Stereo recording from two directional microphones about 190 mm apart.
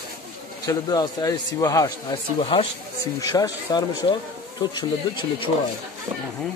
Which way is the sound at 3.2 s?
20° left (ahead or behind).